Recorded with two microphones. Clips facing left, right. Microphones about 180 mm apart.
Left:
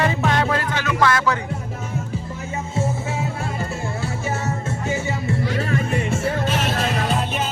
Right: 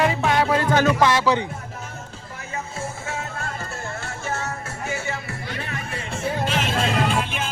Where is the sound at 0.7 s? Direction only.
45° right (ahead or behind).